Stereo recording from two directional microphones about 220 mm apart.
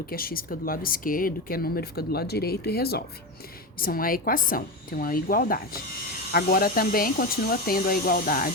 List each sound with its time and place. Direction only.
0.1 s speech: 40° left (ahead or behind)